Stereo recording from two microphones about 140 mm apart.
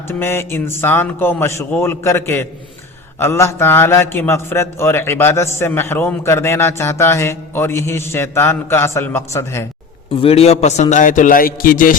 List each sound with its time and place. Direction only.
0.2 s a man's voice: 15° left (ahead or behind)
10.2 s a man's voice: 45° left (ahead or behind); by 11.9 s 85° left